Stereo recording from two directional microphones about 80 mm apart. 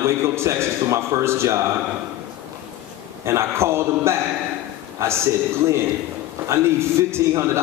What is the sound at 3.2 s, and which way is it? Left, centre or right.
A man's voice, right.